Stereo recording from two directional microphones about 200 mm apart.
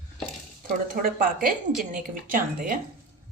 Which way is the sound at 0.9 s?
45° right (ahead or behind).